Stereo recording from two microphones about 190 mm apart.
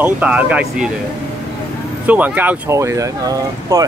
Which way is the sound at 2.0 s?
10° right (ahead or behind).